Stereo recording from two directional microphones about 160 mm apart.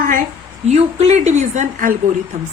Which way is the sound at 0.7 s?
45° right (ahead or behind).